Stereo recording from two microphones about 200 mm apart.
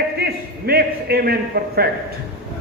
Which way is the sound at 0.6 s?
50° right (ahead or behind).